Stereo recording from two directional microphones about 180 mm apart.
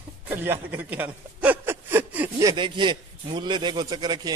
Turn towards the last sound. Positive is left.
turn(degrees=-25)  # may be behind; listen again after turning